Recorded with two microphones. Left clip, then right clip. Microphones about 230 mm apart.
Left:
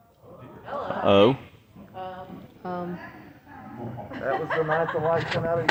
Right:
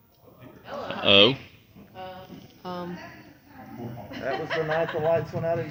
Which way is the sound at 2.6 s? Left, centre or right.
Left.